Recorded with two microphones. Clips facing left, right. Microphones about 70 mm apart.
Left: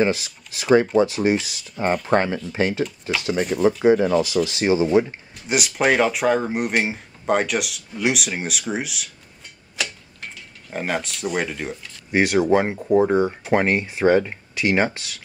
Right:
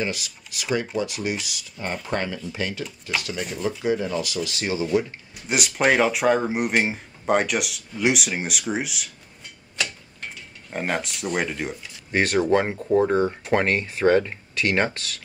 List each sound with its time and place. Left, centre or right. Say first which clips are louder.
0.0 s speech: left 8 dB; left
3.3 s speech: left 13 dB; left
3.8 s speech: left 6 dB; left
5.5 s speech: left 1 dB; centre
9.8 s tick-tock: even; centre
12.1 s speech: left 3 dB; centre